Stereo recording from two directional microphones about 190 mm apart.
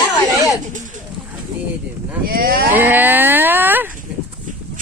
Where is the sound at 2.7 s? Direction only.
10° right (ahead or behind).